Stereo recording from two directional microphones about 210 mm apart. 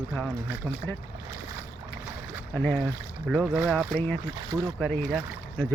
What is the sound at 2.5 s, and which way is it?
Speech, 10° left (ahead or behind).